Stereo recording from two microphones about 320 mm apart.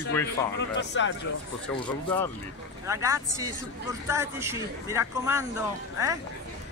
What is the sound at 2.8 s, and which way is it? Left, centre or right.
Speech, centre.